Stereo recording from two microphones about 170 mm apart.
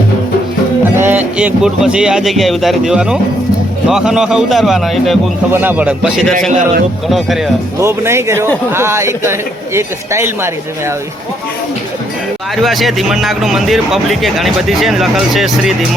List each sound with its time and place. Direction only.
0.9 s a man's voice: 10° right (ahead or behind)
5.5 s speech: 10° right (ahead or behind)
7.8 s speech: 15° right (ahead or behind)
12.6 s speech: centre (ahead or behind)